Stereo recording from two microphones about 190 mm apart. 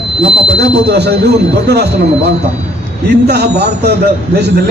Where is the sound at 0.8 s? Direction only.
60° right (ahead or behind).